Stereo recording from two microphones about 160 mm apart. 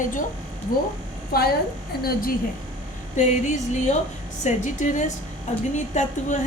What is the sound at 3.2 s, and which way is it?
A woman's voice, 45° left (ahead or behind).